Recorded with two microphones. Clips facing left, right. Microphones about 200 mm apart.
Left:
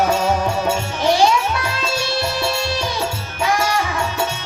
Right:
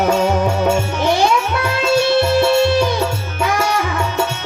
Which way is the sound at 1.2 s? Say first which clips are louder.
Right 1 dB; 55° right (ahead or behind).